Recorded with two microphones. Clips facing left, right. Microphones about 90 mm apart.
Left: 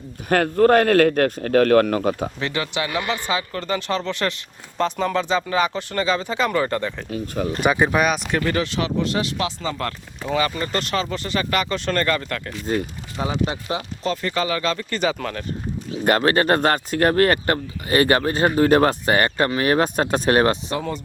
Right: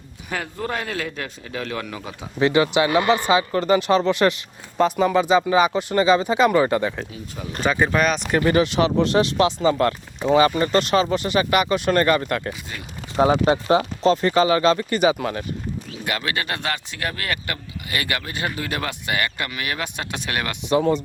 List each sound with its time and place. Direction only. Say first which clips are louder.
0.3 s a man's voice: left 12 dB; 55° left (ahead or behind)
2.4 s speech: right 7 dB; 15° right (ahead or behind)
7.1 s a man's voice: left 9 dB; 65° left (ahead or behind)
7.6 s speech: even; 10° left (ahead or behind)
8.4 s speech: right 5 dB; 15° right (ahead or behind)
13.1 s speech: right 7 dB; 50° right (ahead or behind)
14.1 s speech: right 6 dB; 25° right (ahead or behind)
16.0 s speech: left 9 dB; 40° left (ahead or behind)
20.7 s speech: right 7 dB; 20° right (ahead or behind)